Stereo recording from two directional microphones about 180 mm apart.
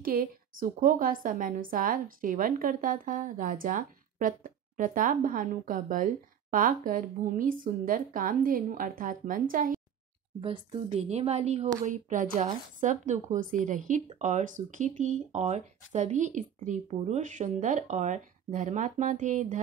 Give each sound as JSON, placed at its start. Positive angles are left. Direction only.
{"t": 0.0, "sound": "a woman's voice", "side_deg": -50}
{"t": 10.4, "sound": "a woman's voice", "side_deg": -30}